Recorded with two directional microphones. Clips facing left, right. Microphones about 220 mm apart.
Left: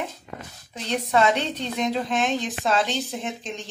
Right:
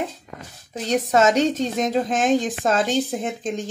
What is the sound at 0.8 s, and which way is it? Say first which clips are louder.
A woman's voice: right 3 dB; 45° right (ahead or behind).